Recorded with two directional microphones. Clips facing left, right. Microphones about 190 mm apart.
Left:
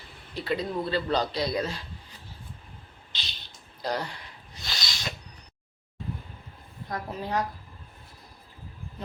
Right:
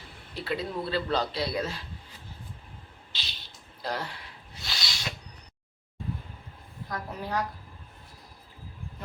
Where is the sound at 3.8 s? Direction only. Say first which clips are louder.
Left 3 dB; centre (ahead or behind).